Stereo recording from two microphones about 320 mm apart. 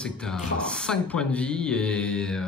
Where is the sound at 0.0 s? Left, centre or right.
Centre.